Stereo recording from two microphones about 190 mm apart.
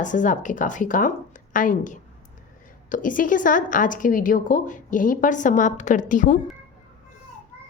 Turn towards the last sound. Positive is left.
turn(degrees=45)  # may be behind; listen again after turning